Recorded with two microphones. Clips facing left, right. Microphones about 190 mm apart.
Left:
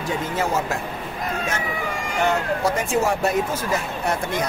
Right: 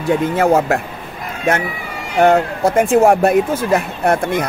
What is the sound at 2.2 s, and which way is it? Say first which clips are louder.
Speech: right 9 dB; 55° right (ahead or behind).